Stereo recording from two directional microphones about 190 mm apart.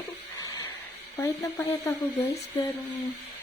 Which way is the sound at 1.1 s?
15° left (ahead or behind).